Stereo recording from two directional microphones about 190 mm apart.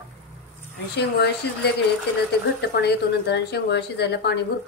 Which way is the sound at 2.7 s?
60° left (ahead or behind).